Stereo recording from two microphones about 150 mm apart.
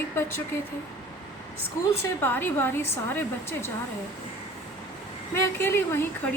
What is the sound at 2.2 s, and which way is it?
A woman's voice, 15° left (ahead or behind).